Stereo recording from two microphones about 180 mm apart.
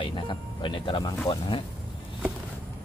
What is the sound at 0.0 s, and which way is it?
Speech, 30° left (ahead or behind).